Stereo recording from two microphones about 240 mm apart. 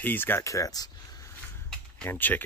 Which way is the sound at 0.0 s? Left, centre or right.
Centre.